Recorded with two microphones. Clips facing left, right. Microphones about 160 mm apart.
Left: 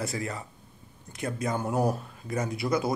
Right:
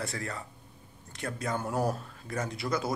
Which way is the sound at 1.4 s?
15° left (ahead or behind).